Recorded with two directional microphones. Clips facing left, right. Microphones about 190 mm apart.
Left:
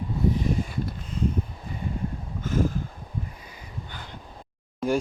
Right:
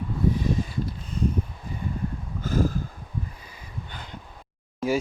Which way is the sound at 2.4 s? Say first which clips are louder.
Right 1 dB; 35° right (ahead or behind).